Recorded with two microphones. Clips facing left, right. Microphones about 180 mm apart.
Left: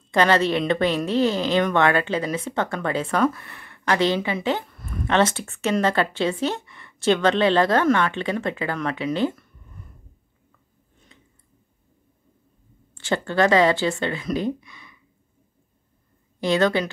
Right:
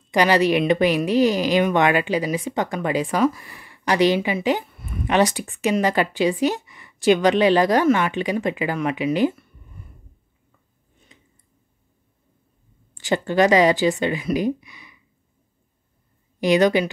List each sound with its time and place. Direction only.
0.1 s a woman's voice: 15° right (ahead or behind)
11.1 s a sound: 15° right (ahead or behind)
12.9 s a woman's voice: 15° right (ahead or behind)
16.3 s a woman's voice: 15° right (ahead or behind)